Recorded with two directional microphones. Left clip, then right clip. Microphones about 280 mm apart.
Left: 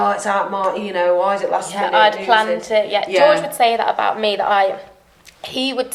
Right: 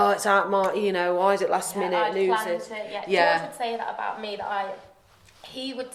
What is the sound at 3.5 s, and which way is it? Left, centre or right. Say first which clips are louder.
Speech: left 14 dB; left.